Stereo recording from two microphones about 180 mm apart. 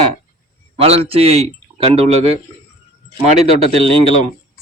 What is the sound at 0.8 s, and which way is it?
Speech, 35° right (ahead or behind).